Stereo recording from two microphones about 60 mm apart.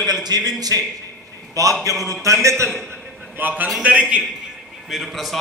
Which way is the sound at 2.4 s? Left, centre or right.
Right.